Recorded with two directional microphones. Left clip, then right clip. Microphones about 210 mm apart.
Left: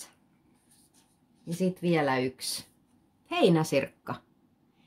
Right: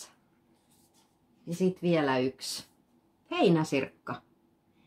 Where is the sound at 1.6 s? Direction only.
40° left (ahead or behind).